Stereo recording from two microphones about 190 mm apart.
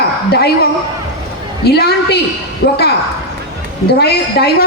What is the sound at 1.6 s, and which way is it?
A man's voice, 60° left (ahead or behind).